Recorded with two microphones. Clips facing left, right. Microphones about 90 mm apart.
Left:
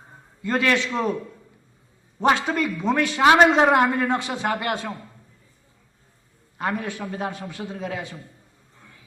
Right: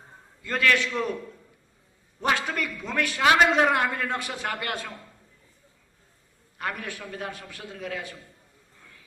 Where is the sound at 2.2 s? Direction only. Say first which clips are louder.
Left 6 dB; 25° left (ahead or behind).